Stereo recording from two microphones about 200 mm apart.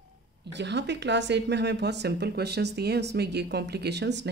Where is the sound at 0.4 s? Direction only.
60° right (ahead or behind).